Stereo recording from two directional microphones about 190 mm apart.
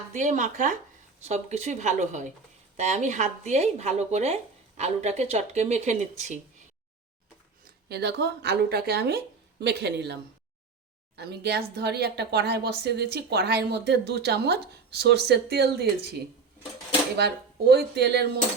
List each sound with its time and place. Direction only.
0.1 s speech: 40° right (ahead or behind)
7.9 s speech: 60° right (ahead or behind)
11.2 s speech: 60° right (ahead or behind)
17.2 s speech: 60° right (ahead or behind)